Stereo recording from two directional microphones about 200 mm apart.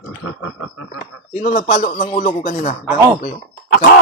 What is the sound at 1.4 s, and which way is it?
Speech, 40° left (ahead or behind).